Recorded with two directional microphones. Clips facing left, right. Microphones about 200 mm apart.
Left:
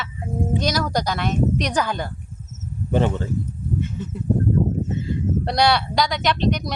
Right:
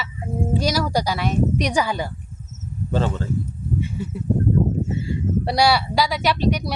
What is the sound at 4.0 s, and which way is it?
Speech, 10° right (ahead or behind).